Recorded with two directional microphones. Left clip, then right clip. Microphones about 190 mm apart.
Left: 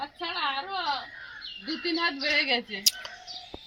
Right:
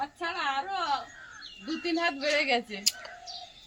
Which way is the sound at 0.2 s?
20° right (ahead or behind).